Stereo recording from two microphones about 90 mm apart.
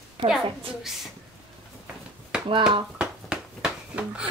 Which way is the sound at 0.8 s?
5° right (ahead or behind).